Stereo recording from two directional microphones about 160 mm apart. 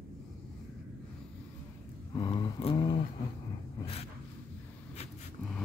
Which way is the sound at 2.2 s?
25° left (ahead or behind).